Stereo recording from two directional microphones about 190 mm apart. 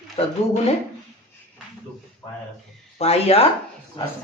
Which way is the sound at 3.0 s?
30° left (ahead or behind).